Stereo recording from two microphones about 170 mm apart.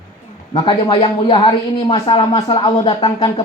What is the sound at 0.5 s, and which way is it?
Speech, 30° left (ahead or behind).